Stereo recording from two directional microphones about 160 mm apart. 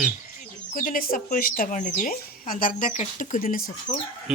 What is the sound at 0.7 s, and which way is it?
Speech, 60° left (ahead or behind).